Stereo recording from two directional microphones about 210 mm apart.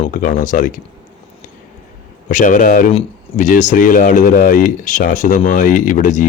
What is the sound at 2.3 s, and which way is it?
Speech, 35° left (ahead or behind).